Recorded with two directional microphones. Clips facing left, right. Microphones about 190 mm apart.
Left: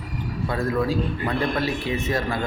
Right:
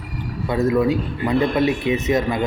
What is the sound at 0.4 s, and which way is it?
Speech, 20° right (ahead or behind).